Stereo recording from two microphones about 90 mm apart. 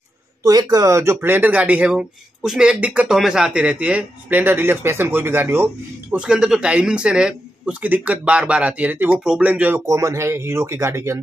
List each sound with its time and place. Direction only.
0.4 s speech: 45° right (ahead or behind); by 5.7 s 25° right (ahead or behind)
6.1 s speech: 10° right (ahead or behind)
9.8 s speech: 35° right (ahead or behind)